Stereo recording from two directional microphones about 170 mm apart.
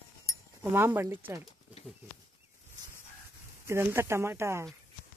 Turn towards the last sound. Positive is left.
turn(degrees=-15)  # may be behind; listen again after turning